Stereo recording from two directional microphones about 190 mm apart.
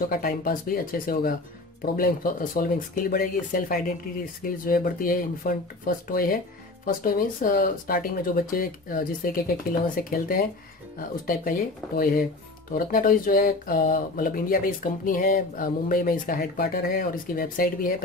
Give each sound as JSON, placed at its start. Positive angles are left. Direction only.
{"t": 0.1, "sound": "speech", "side_deg": 50}